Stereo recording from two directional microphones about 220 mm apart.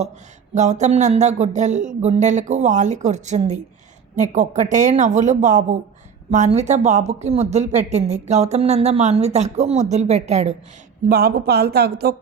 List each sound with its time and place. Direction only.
0.5 s speech: 30° right (ahead or behind)
11.1 s speech: 45° right (ahead or behind)